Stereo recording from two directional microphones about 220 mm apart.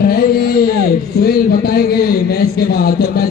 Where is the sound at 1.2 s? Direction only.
45° left (ahead or behind).